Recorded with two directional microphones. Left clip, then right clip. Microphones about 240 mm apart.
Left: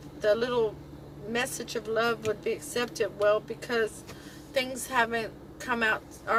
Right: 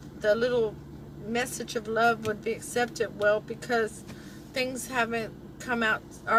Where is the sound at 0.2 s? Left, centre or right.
Left.